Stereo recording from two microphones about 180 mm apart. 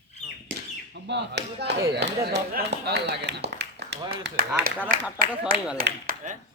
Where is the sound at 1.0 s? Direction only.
70° right (ahead or behind).